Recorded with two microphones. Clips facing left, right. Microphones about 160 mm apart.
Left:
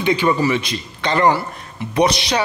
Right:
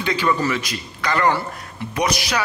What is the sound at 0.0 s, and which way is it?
A man's voice, 20° left (ahead or behind).